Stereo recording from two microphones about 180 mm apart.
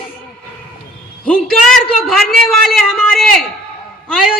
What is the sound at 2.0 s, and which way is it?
A man's voice, centre (ahead or behind).